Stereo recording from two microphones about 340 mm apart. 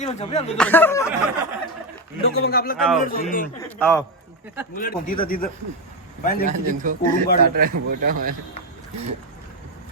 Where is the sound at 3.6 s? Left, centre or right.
Centre.